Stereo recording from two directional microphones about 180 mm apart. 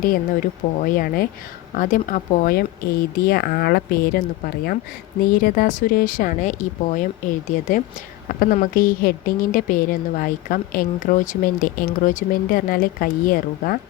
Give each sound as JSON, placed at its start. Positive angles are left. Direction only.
{"t": 0.0, "sound": "a woman's voice", "side_deg": 50}
{"t": 5.3, "sound": "a woman's voice", "side_deg": 50}